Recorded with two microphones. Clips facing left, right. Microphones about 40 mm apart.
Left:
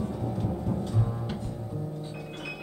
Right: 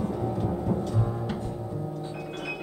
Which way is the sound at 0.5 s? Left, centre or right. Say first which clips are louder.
Right 3 dB; right.